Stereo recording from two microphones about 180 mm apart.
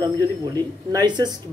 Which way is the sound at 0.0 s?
20° right (ahead or behind).